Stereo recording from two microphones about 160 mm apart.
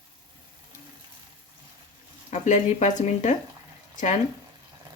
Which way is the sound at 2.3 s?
50° left (ahead or behind).